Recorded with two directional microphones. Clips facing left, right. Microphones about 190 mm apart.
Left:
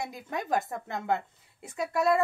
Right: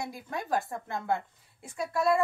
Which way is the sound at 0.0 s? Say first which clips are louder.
Left 1 dB; 20° left (ahead or behind).